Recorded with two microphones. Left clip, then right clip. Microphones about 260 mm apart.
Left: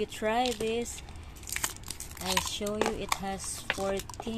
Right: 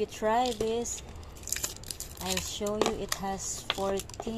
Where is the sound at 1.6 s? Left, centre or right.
Centre.